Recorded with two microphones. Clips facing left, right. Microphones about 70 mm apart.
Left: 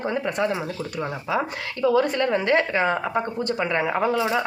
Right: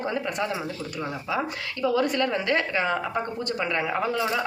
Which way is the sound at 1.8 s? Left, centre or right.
Left.